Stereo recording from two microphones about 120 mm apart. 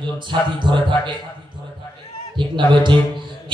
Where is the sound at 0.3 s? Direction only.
40° right (ahead or behind).